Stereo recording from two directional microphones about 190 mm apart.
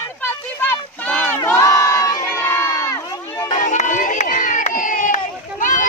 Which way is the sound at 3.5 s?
40° left (ahead or behind).